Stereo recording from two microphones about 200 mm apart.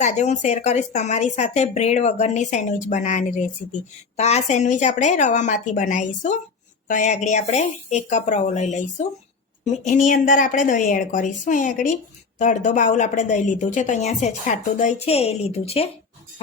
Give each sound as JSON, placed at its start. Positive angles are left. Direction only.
{"t": 0.0, "sound": "a woman's voice", "side_deg": 35}
{"t": 9.8, "sound": "a woman's voice", "side_deg": 40}